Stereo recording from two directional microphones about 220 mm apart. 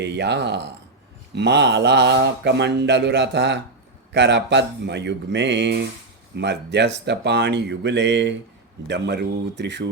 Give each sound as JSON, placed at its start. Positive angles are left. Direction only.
{"t": 0.0, "sound": "speech", "side_deg": -50}